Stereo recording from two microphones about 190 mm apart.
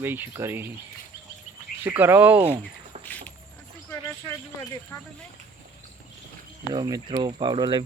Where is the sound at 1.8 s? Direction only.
10° right (ahead or behind).